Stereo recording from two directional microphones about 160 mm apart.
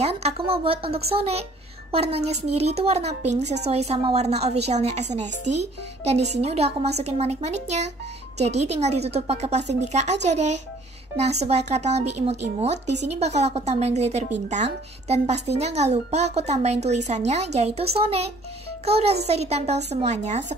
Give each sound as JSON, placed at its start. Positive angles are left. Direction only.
{"t": 0.0, "sound": "a woman's voice", "side_deg": -40}